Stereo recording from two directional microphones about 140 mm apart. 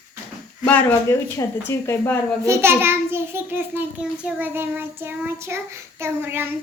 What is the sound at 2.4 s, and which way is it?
A child's voice, 20° right (ahead or behind).